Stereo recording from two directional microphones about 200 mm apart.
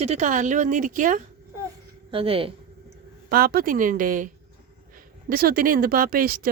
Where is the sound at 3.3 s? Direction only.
50° right (ahead or behind).